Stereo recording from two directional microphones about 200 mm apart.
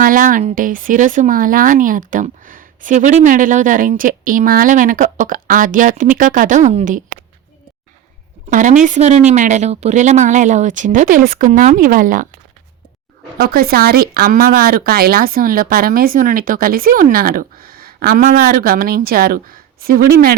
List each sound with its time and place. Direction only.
0.0 s speech: 45° right (ahead or behind)
8.4 s speech: 40° right (ahead or behind)
13.4 s speech: 50° right (ahead or behind)